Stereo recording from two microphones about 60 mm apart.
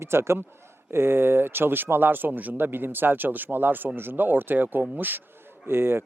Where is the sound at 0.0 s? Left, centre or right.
Right.